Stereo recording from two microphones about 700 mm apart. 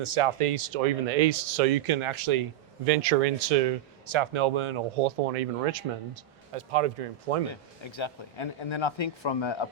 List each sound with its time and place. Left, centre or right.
0.0 s speech: right
2.8 s speech: right
4.0 s speech: right
7.5 s speech: left